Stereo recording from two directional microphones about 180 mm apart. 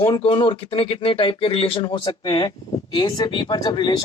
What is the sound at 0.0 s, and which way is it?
Speech, 30° left (ahead or behind).